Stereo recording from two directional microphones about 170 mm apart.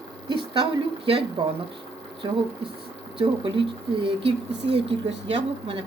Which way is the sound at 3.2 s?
30° right (ahead or behind).